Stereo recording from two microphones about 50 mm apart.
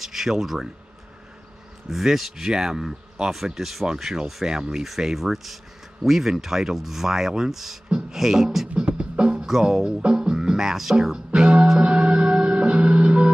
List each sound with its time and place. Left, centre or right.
0.0 s speech: centre
1.9 s speech: centre
7.9 s music: centre